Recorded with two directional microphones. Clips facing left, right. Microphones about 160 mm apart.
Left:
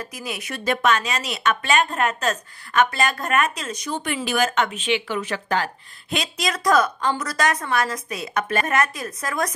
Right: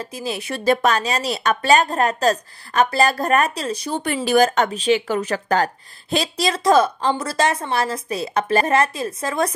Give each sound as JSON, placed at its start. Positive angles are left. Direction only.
{"t": 0.0, "sound": "speech", "side_deg": -30}